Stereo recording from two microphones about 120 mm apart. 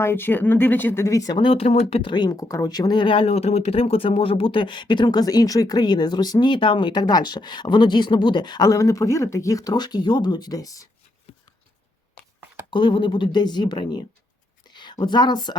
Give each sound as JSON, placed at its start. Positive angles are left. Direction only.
{"t": 0.0, "sound": "speech", "side_deg": 20}
{"t": 1.4, "sound": "speech", "side_deg": 50}
{"t": 12.7, "sound": "a woman's voice", "side_deg": 40}